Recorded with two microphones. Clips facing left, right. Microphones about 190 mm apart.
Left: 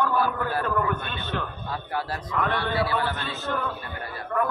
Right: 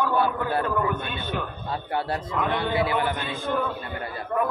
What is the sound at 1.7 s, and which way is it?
A man's voice, 25° right (ahead or behind).